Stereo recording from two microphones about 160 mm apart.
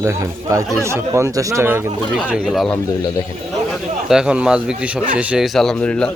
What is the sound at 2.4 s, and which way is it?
A man's voice, centre (ahead or behind).